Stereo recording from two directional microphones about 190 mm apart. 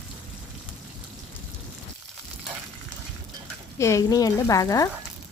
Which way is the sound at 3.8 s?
15° left (ahead or behind).